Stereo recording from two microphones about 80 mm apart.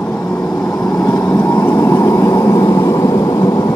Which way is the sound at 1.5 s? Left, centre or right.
Left.